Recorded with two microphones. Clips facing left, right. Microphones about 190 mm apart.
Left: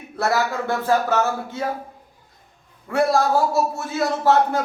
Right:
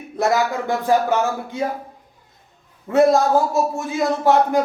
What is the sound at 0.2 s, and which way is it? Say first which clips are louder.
Speech: right 3 dB; 15° right (ahead or behind).